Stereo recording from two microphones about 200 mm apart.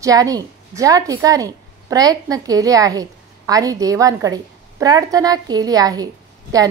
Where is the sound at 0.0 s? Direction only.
15° right (ahead or behind).